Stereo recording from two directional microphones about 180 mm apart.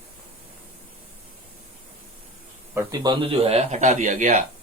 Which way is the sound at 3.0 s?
25° right (ahead or behind).